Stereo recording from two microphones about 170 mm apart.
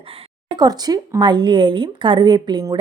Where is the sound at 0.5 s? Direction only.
25° right (ahead or behind).